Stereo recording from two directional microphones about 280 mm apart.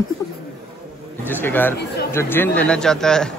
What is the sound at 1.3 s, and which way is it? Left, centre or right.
Speech, centre.